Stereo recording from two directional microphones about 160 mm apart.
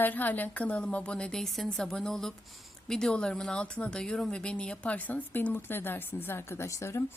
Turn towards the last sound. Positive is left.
turn(degrees=20)  # may be behind; listen again after turning